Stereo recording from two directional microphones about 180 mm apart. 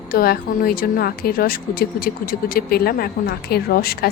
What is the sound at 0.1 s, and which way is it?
Speech, 55° left (ahead or behind).